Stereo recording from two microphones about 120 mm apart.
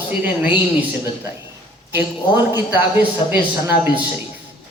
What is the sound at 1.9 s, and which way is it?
A man's voice, 20° right (ahead or behind).